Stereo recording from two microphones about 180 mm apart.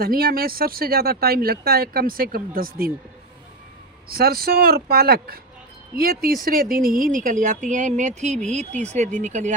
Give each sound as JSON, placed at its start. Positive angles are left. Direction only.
{"t": 0.0, "sound": "speech", "side_deg": -55}
{"t": 4.1, "sound": "speech", "side_deg": -55}